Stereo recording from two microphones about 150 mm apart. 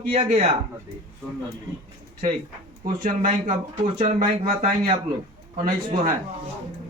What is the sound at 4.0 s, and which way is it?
Speech, 50° right (ahead or behind).